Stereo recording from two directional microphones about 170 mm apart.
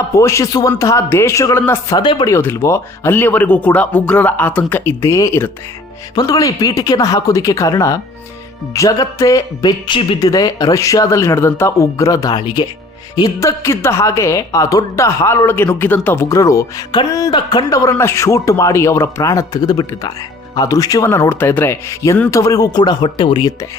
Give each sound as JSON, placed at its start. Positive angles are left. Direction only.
{"t": 0.2, "sound": "speech", "side_deg": 20}
{"t": 2.0, "sound": "speech", "side_deg": 30}
{"t": 2.3, "sound": "speech", "side_deg": 15}